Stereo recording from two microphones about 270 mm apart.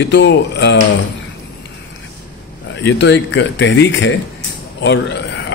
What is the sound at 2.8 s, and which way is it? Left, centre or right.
Speech, left.